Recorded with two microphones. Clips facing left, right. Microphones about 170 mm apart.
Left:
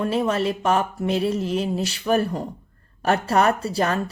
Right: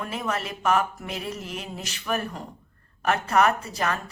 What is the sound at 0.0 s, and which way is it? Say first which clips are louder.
Speech: left 8 dB; 30° left (ahead or behind).